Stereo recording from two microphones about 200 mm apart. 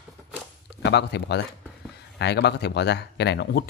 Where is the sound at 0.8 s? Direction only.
60° left (ahead or behind).